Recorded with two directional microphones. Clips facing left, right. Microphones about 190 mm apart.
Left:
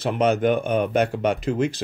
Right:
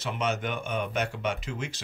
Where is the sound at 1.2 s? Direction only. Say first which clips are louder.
Left 10 dB; 55° left (ahead or behind).